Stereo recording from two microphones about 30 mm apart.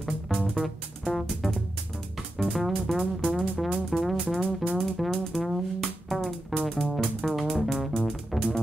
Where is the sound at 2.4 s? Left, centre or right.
Centre.